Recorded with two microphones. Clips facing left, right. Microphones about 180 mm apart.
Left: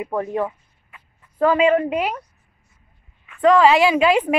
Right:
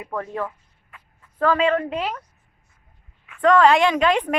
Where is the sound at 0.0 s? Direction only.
20° left (ahead or behind).